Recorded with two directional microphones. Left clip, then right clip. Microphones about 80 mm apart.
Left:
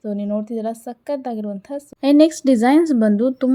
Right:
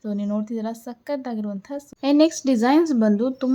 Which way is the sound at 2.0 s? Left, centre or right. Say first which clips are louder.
Left 4 dB; left.